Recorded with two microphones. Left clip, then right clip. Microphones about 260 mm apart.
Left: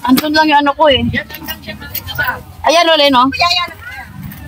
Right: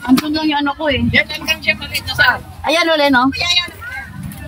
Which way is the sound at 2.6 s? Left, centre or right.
Centre.